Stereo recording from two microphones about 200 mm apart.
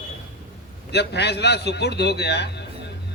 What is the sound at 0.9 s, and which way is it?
A man's voice, 55° left (ahead or behind).